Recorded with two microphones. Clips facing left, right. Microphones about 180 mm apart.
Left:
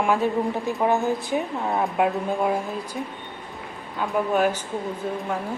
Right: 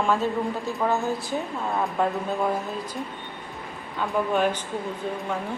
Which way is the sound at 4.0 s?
5° left (ahead or behind).